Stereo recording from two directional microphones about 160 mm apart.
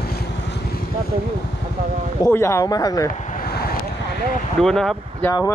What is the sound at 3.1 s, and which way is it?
Vehicle, 55° left (ahead or behind).